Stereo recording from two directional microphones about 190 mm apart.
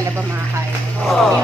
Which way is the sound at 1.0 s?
Centre (ahead or behind).